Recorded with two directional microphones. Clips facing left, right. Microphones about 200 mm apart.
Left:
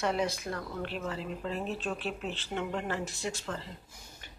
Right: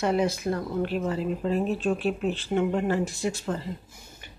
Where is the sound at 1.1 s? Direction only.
40° right (ahead or behind).